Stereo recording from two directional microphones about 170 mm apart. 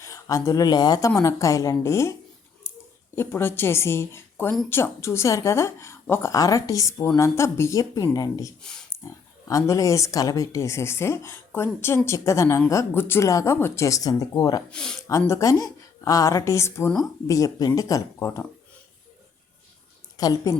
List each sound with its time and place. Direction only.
0.0 s a woman's voice: 20° left (ahead or behind)
2.6 s scissors: 15° left (ahead or behind)
3.2 s a woman's voice: 15° left (ahead or behind)
14.7 s speech: 5° left (ahead or behind)
15.2 s a woman's voice: 15° left (ahead or behind)
20.1 s a woman's voice: 20° left (ahead or behind)